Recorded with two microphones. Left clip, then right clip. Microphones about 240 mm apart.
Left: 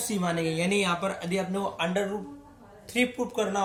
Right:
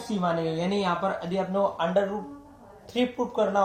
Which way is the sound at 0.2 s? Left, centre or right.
Left.